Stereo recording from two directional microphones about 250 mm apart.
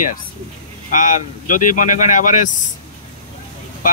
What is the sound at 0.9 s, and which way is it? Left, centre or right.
Speech, left.